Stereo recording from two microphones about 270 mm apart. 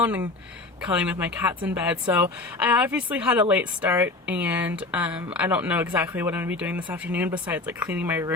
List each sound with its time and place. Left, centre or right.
0.0 s speech: centre